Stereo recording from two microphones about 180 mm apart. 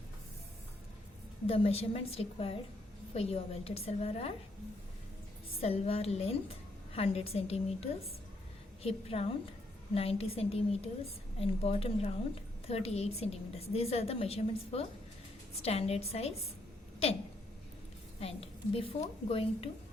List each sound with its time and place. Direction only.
1.5 s a woman's voice: 30° left (ahead or behind)
5.5 s a woman's voice: 35° left (ahead or behind)
18.2 s a woman's voice: 30° left (ahead or behind)